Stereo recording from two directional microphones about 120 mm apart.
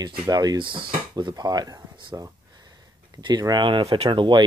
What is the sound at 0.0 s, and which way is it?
Speech, 35° right (ahead or behind).